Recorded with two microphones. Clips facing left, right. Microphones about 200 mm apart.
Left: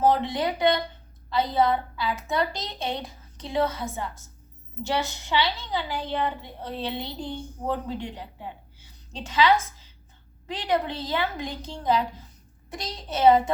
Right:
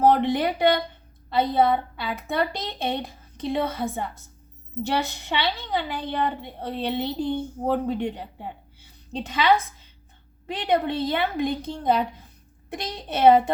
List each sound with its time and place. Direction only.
0.0 s a woman's voice: 60° right (ahead or behind)